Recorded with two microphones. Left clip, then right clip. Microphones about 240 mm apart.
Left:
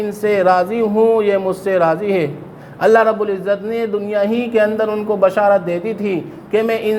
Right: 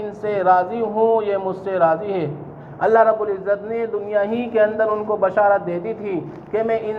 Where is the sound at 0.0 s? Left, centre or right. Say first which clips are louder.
Left 5 dB; left.